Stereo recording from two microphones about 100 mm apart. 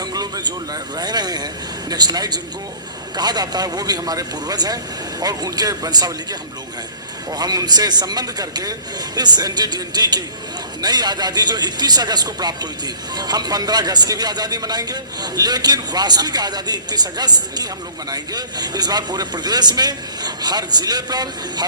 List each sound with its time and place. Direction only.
0.0 s speech: 40° right (ahead or behind)
7.3 s speech: 40° right (ahead or behind)